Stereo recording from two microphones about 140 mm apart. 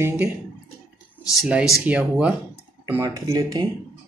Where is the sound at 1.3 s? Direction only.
5° right (ahead or behind).